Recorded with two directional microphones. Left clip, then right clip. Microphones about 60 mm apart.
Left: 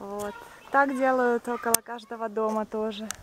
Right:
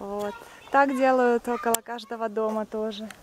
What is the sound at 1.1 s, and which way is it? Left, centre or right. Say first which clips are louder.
Speech: right 3 dB; centre.